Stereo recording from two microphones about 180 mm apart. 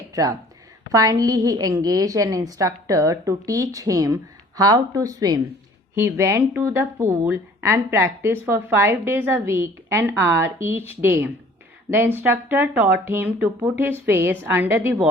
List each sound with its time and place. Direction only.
0.1 s a woman's voice: 20° right (ahead or behind)